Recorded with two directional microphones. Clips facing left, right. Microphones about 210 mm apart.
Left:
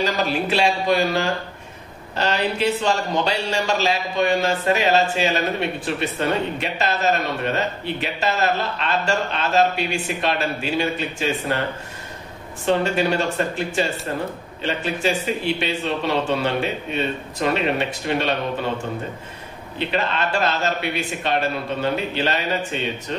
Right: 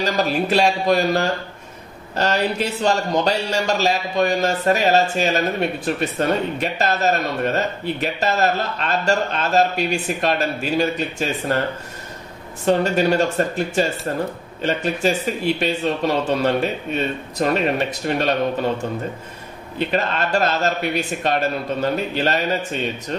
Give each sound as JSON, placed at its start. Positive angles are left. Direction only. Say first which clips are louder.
{"t": 0.0, "sound": "a man's voice", "louder": "right 2 dB", "side_deg": -45}
{"t": 12.6, "sound": "a man's voice", "louder": "right 2 dB", "side_deg": -40}
{"t": 19.8, "sound": "a man's voice", "louder": "right 2 dB", "side_deg": -45}